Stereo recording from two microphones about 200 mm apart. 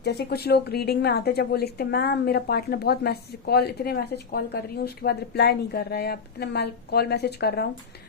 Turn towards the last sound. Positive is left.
turn(degrees=55)  # may be behind; listen again after turning